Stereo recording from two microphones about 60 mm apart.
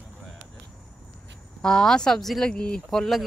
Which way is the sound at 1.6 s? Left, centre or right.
Centre.